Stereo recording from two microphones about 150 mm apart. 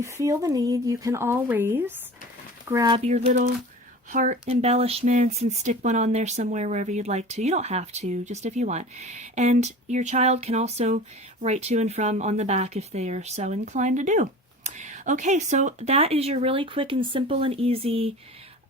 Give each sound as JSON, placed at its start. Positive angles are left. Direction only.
{"t": 0.0, "sound": "speech", "side_deg": -20}
{"t": 2.6, "sound": "speech", "side_deg": -25}
{"t": 3.0, "sound": "speech", "side_deg": -45}
{"t": 4.1, "sound": "speech", "side_deg": -55}